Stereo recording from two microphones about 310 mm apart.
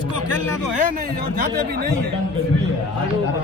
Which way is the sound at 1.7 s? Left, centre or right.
Right.